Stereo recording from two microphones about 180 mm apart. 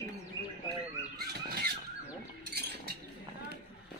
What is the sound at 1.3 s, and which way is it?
Squeal, 60° right (ahead or behind).